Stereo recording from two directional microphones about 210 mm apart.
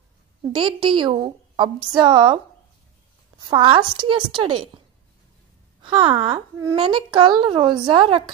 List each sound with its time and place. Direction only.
0.5 s a woman's voice: 25° right (ahead or behind)
5.8 s a woman's voice: 25° right (ahead or behind)